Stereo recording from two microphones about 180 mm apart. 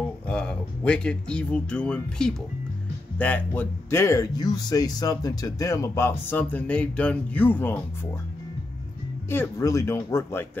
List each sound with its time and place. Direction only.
0.3 s speech: 5° left (ahead or behind)
9.3 s speech: 15° left (ahead or behind)